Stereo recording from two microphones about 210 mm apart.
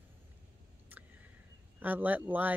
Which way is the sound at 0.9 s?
10° right (ahead or behind).